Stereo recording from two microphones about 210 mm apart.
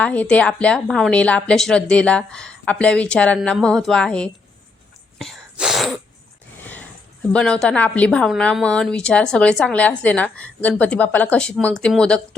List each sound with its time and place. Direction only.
0.0 s a woman's voice: 5° left (ahead or behind)
5.2 s sneeze: centre (ahead or behind)
7.3 s a woman's voice: 5° left (ahead or behind)